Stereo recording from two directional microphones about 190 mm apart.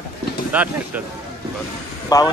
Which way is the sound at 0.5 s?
10° right (ahead or behind).